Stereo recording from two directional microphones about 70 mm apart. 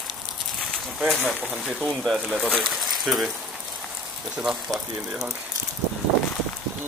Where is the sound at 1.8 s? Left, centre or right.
Centre.